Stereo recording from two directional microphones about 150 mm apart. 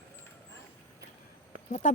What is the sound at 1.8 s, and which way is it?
Speech, 55° left (ahead or behind).